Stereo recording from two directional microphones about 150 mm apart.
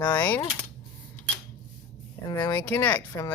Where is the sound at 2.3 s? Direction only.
25° left (ahead or behind).